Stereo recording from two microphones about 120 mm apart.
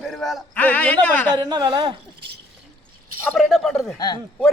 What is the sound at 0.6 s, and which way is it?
Speech, 10° left (ahead or behind).